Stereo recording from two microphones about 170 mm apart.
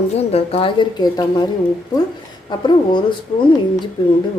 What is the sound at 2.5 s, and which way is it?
Speech, 25° left (ahead or behind).